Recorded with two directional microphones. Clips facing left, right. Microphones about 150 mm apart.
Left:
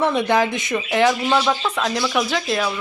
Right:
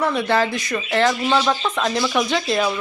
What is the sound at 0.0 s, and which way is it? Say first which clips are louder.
A woman's voice: left 1 dB; 20° left (ahead or behind).